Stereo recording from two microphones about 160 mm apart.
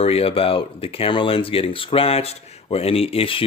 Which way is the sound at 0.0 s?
35° left (ahead or behind).